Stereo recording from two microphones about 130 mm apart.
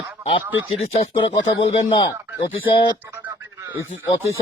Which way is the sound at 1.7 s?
40° left (ahead or behind).